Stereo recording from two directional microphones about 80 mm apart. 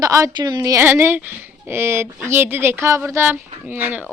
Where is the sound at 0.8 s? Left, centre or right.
Right.